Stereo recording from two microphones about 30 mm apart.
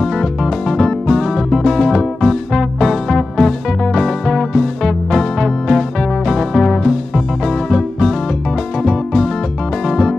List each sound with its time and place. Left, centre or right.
0.0 s music: centre